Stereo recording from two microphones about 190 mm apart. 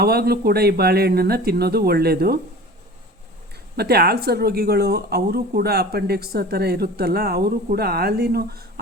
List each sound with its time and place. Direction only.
0.0 s speech: 55° right (ahead or behind)
3.8 s speech: 55° right (ahead or behind)